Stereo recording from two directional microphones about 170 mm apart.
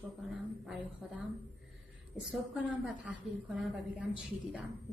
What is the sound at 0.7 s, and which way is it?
Speech, 10° right (ahead or behind).